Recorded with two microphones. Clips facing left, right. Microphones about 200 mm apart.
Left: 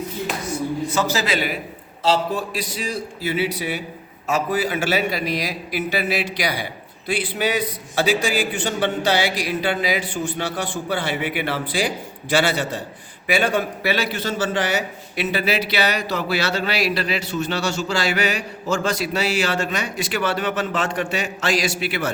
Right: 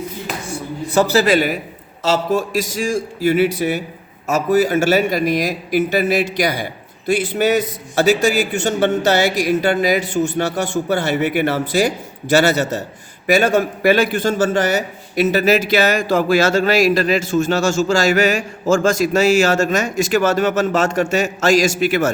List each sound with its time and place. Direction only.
1.1 s a man's voice: 50° right (ahead or behind)